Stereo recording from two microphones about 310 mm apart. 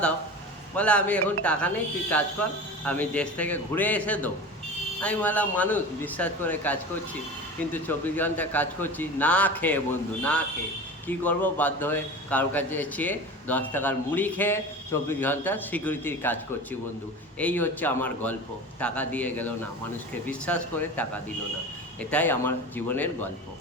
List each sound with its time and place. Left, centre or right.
0.8 s a man's voice: centre
11.1 s a man's voice: centre
17.4 s a man's voice: centre
22.1 s a man's voice: centre